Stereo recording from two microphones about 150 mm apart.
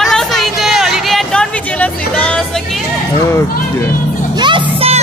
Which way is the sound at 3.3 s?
15° left (ahead or behind).